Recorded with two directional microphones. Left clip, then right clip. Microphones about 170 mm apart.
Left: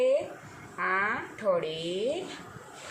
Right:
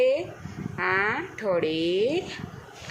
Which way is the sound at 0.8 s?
50° right (ahead or behind).